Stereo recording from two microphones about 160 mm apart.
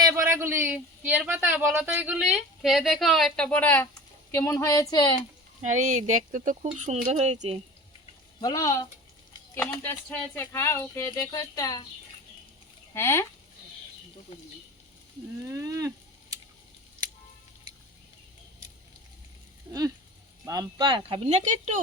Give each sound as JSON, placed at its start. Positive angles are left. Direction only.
{"t": 0.0, "sound": "a man's voice", "side_deg": -20}
{"t": 5.6, "sound": "speech", "side_deg": -50}
{"t": 8.4, "sound": "speech", "side_deg": 25}
{"t": 12.9, "sound": "speech", "side_deg": 15}
{"t": 15.4, "sound": "speech", "side_deg": -20}
{"t": 20.4, "sound": "speech", "side_deg": -20}